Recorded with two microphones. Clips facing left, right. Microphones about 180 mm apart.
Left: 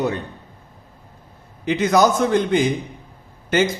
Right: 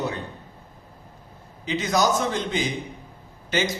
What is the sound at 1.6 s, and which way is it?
A man's voice, 55° left (ahead or behind).